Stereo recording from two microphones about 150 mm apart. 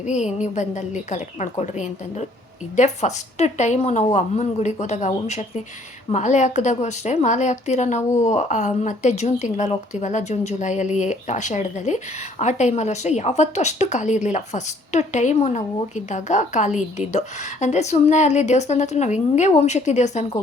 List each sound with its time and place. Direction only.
0.0 s a woman's voice: 50° left (ahead or behind)